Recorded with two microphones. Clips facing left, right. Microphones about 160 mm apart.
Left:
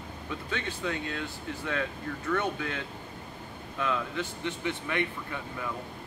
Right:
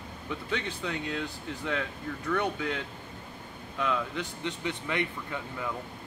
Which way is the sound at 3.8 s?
15° right (ahead or behind).